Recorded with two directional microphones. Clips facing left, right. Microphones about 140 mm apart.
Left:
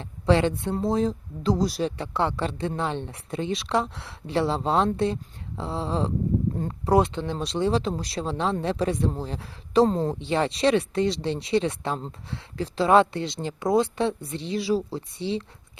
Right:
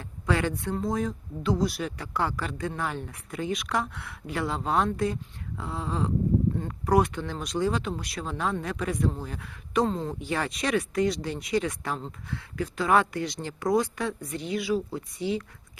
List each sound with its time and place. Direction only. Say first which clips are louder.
0.0 s speech: left 6 dB; 25° left (ahead or behind)